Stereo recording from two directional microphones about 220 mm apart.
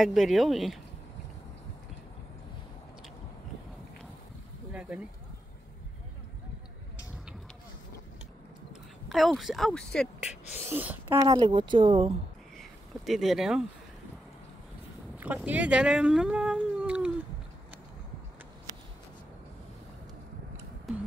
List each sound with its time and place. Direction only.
0.0 s speech: centre (ahead or behind)
4.7 s speech: 5° right (ahead or behind)
9.1 s speech: centre (ahead or behind)
10.6 s speech: 10° right (ahead or behind)
12.5 s a sound: centre (ahead or behind)
15.1 s speech: 5° right (ahead or behind)
20.9 s music: centre (ahead or behind)